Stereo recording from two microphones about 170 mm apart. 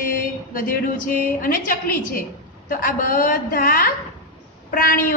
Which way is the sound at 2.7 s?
55° left (ahead or behind).